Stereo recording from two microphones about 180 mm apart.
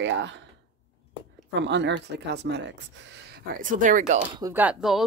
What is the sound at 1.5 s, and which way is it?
Speech, 80° right.